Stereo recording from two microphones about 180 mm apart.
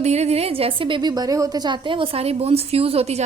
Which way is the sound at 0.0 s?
35° right (ahead or behind).